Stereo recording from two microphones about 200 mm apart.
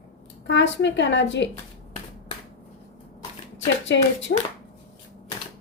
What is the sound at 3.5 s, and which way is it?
Speech, 65° left (ahead or behind).